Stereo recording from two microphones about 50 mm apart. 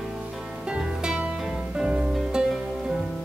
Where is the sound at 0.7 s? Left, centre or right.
Centre.